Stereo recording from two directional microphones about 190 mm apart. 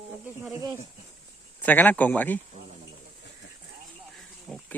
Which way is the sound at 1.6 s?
10° left (ahead or behind).